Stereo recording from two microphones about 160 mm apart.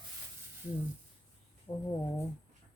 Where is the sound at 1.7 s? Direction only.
35° left (ahead or behind).